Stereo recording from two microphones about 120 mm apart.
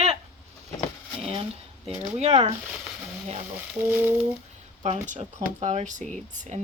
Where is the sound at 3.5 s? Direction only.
15° right (ahead or behind).